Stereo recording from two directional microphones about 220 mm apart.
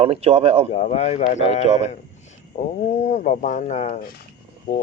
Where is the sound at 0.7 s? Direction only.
30° left (ahead or behind).